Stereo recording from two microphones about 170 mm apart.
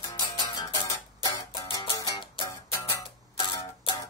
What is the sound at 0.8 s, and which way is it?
Music, 20° left (ahead or behind).